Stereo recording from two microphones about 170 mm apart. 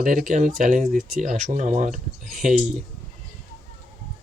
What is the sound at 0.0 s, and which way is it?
Speech, 50° right (ahead or behind).